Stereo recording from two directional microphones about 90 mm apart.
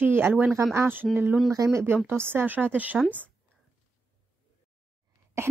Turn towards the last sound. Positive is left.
turn(degrees=-30)  # may be behind; listen again after turning